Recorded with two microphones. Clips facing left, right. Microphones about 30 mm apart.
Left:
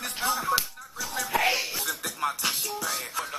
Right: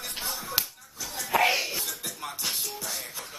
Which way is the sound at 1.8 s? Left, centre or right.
Left.